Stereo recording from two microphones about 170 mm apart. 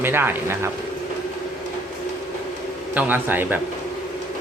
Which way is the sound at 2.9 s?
10° right (ahead or behind).